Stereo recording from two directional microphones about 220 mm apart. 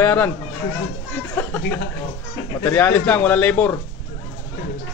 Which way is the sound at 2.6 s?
5° left (ahead or behind).